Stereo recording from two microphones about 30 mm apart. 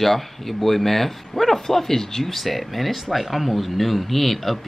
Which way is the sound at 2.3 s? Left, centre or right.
Centre.